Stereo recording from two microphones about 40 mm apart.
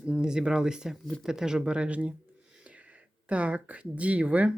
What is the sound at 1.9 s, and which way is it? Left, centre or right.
Speech, right.